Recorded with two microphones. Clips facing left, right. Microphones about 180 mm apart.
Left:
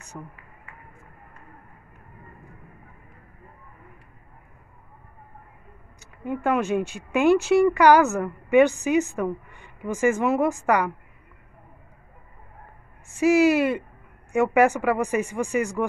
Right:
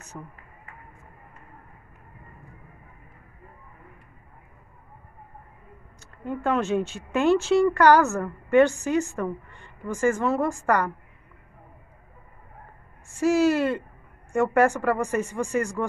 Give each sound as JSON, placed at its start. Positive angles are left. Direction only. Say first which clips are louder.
{"t": 0.1, "sound": "speech", "louder": "left 1 dB", "side_deg": 0}
{"t": 5.9, "sound": "a woman's voice", "louder": "left 2 dB", "side_deg": 10}
{"t": 13.1, "sound": "a woman's voice", "louder": "left 2 dB", "side_deg": 15}
{"t": 15.2, "sound": "a woman's voice", "louder": "left 1 dB", "side_deg": 15}